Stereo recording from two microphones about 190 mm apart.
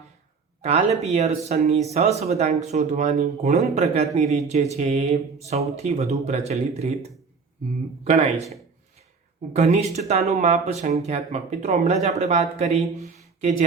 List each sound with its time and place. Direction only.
0.6 s speech: 35° right (ahead or behind)
8.0 s speech: 35° right (ahead or behind)
9.5 s speech: 35° right (ahead or behind)